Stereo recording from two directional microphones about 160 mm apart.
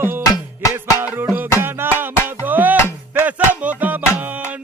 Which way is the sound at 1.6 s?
15° right (ahead or behind).